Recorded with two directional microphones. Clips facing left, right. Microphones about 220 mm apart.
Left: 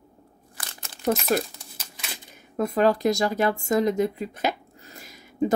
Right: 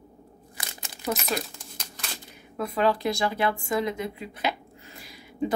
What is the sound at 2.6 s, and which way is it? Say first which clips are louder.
A woman's voice: left 4 dB; 45° left (ahead or behind).